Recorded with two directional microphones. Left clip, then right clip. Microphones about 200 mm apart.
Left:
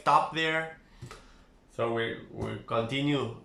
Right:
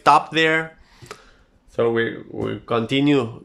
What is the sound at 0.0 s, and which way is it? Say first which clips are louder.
Speech: right 9 dB; 55° right (ahead or behind).